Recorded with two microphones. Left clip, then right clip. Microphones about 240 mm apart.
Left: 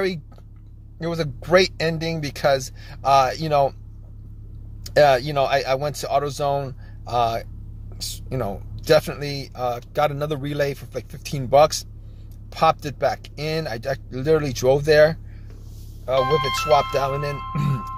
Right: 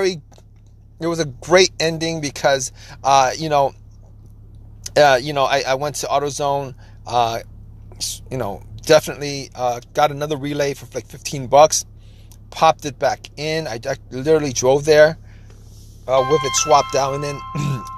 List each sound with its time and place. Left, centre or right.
0.9 s speech: centre
4.8 s speech: centre
16.2 s speech: centre
16.9 s speech: centre